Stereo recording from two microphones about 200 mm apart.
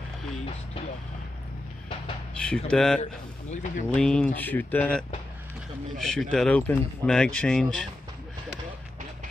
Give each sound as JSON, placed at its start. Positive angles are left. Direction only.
{"t": 2.4, "sound": "speech", "side_deg": 5}
{"t": 3.0, "sound": "speech", "side_deg": 35}
{"t": 3.9, "sound": "speech", "side_deg": 5}